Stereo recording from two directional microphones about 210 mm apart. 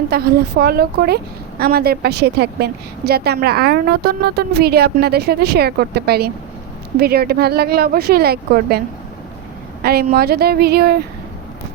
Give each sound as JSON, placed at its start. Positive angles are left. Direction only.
{"t": 0.1, "sound": "a woman's voice", "side_deg": -50}
{"t": 9.8, "sound": "a woman's voice", "side_deg": -45}